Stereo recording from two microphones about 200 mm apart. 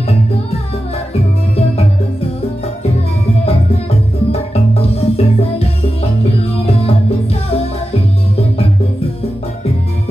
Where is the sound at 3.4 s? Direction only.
30° left (ahead or behind).